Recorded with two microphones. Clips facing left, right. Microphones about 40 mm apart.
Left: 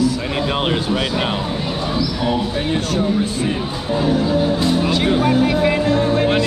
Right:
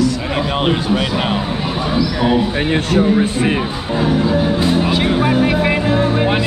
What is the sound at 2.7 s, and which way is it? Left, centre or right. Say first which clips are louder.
Speech: right 5 dB; right.